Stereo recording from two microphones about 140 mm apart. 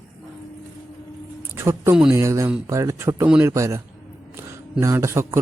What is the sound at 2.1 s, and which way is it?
Speech, 20° right (ahead or behind).